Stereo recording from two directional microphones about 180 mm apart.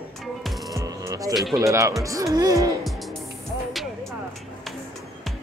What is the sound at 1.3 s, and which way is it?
Speech, centre (ahead or behind).